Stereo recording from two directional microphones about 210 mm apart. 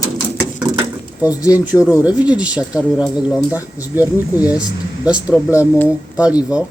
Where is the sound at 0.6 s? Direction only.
20° right (ahead or behind).